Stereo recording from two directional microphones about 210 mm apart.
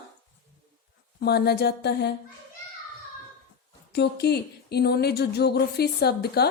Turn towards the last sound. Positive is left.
turn(degrees=50)  # may be behind; listen again after turning